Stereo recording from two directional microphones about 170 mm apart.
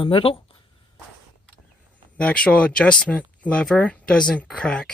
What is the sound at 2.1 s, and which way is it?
Speech, 5° left (ahead or behind).